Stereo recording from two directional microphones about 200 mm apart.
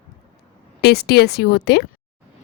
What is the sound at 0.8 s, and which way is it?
Speech, 55° left (ahead or behind).